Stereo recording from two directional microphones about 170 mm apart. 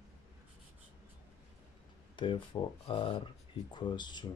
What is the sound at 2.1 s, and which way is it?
Speech, 30° left (ahead or behind).